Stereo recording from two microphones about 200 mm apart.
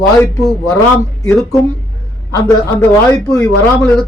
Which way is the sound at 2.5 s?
20° left (ahead or behind).